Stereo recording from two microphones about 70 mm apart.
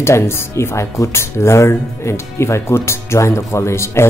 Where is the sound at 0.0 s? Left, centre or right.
Left.